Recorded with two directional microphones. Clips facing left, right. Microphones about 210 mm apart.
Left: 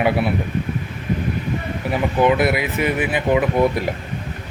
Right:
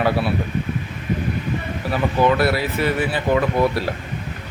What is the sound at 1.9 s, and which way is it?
A man's voice, 20° left (ahead or behind).